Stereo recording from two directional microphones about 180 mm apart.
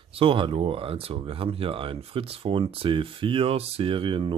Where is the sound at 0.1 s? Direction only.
30° right (ahead or behind).